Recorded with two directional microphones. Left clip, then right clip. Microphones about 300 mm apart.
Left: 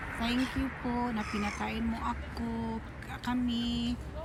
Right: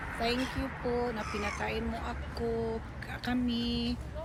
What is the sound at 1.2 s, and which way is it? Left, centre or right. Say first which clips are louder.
Speech: even; right.